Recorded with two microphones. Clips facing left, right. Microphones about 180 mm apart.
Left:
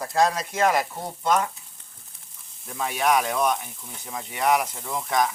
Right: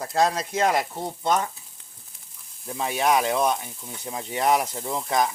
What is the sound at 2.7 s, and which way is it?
Speech, 25° right (ahead or behind).